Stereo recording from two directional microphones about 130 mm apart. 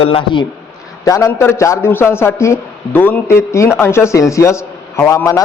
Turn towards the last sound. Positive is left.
turn(degrees=25)  # may be behind; listen again after turning